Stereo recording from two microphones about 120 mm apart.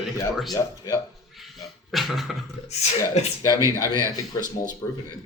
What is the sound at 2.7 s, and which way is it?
Speech, 65° left (ahead or behind).